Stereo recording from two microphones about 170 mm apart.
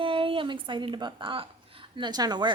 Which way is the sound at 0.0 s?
30° right (ahead or behind).